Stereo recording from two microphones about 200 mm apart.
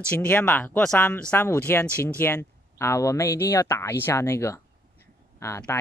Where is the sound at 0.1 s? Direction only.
5° left (ahead or behind).